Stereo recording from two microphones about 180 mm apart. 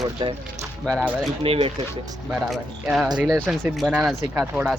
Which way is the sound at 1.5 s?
35° right (ahead or behind).